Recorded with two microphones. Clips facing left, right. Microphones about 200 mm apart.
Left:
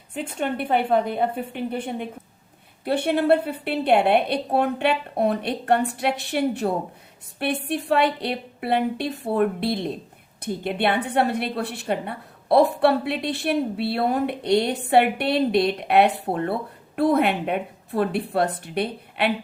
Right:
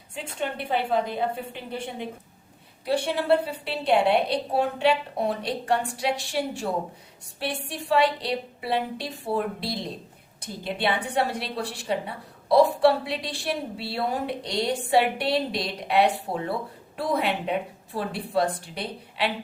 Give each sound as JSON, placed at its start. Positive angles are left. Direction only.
{"t": 0.1, "sound": "a woman's voice", "side_deg": 55}